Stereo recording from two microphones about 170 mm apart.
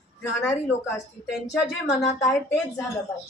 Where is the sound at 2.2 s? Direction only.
20° left (ahead or behind).